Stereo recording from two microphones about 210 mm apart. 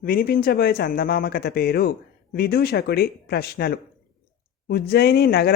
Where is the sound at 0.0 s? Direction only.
45° left (ahead or behind).